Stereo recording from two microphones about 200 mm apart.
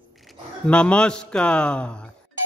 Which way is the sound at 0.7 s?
5° left (ahead or behind).